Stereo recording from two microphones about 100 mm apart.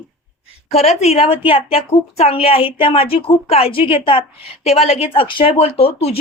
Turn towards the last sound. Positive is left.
turn(degrees=80)